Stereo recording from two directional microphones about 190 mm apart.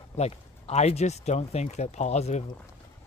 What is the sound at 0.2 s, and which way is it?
Speech, 35° left (ahead or behind).